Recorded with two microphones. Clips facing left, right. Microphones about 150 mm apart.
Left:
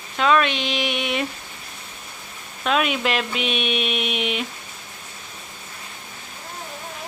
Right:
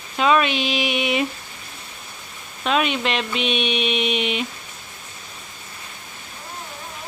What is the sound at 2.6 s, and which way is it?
Speech, centre (ahead or behind).